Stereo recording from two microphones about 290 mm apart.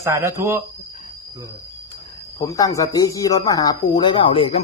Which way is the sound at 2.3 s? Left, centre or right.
Centre.